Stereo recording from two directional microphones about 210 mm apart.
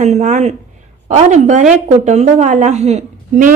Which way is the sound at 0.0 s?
35° right (ahead or behind).